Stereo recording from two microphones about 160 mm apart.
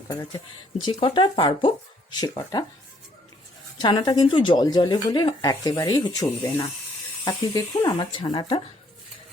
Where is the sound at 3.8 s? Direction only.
25° left (ahead or behind).